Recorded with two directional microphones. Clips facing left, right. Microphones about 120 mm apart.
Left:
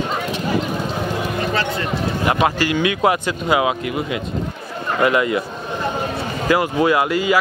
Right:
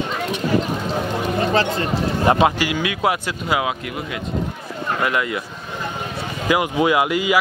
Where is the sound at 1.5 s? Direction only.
35° right (ahead or behind).